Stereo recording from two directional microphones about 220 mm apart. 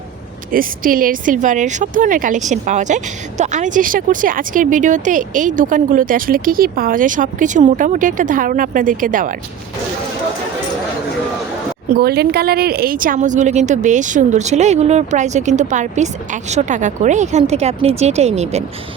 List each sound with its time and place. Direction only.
0.5 s speech: 40° right (ahead or behind)
11.9 s speech: 45° right (ahead or behind); by 18.6 s 30° right (ahead or behind)